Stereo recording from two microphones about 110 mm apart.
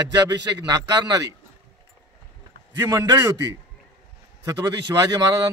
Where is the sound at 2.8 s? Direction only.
25° right (ahead or behind).